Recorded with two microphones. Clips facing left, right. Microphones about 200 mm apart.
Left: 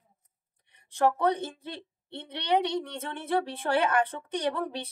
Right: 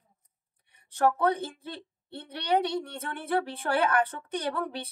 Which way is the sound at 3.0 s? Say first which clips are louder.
Even; 25° left (ahead or behind).